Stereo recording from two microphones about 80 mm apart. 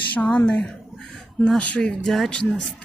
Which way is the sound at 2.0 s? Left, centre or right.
Centre.